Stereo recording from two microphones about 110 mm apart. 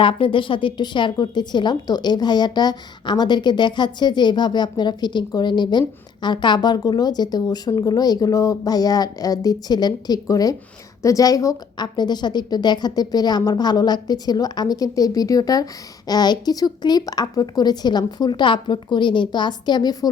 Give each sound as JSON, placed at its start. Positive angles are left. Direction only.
{"t": 0.0, "sound": "a woman's voice", "side_deg": 50}